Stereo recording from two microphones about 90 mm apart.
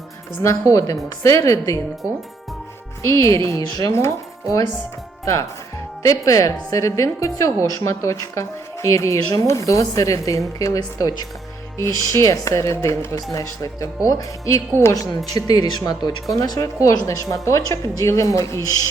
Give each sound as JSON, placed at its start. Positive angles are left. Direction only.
{"t": 0.4, "sound": "a woman's voice", "side_deg": 40}
{"t": 3.0, "sound": "a woman's voice", "side_deg": 35}
{"t": 3.7, "sound": "a woman's voice", "side_deg": 45}
{"t": 15.3, "sound": "a woman's voice", "side_deg": 45}